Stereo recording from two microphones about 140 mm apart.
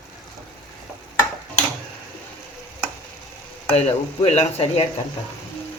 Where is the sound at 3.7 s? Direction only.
50° left (ahead or behind).